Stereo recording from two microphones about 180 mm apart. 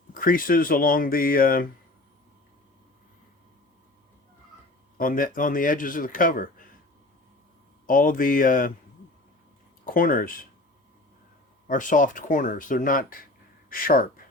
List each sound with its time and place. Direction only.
0.1 s speech: 50° left (ahead or behind)
4.9 s speech: 50° left (ahead or behind)
7.9 s speech: 50° left (ahead or behind)
9.8 s speech: 50° left (ahead or behind)
11.7 s speech: 45° left (ahead or behind)